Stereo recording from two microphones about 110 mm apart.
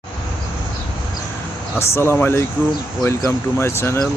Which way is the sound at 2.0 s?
20° left (ahead or behind).